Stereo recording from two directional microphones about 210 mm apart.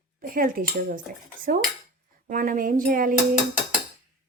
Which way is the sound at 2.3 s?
40° right (ahead or behind).